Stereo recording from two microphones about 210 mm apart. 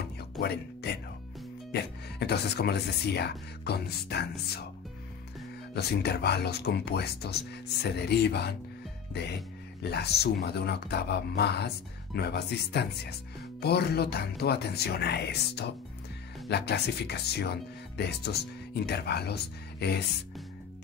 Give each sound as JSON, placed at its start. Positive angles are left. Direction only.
{"t": 0.0, "sound": "music", "side_deg": 50}
{"t": 1.7, "sound": "speech", "side_deg": 50}
{"t": 5.8, "sound": "speech", "side_deg": 50}
{"t": 9.8, "sound": "speech", "side_deg": 50}